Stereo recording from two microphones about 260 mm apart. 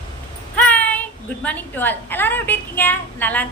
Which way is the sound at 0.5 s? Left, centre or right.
Centre.